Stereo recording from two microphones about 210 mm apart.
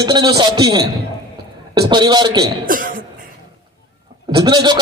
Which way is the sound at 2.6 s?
40° right (ahead or behind).